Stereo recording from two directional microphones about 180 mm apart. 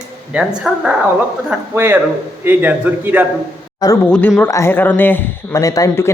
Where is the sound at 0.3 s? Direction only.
5° right (ahead or behind).